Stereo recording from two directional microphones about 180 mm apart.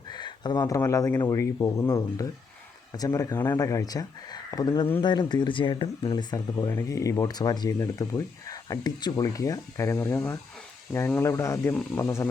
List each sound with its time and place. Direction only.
0.1 s speech: 25° left (ahead or behind)